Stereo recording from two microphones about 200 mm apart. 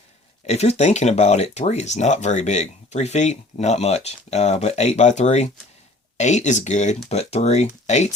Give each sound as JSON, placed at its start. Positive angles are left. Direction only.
{"t": 0.4, "sound": "speech", "side_deg": 35}